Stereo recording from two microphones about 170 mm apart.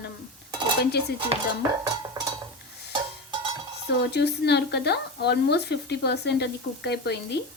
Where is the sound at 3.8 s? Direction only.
80° left.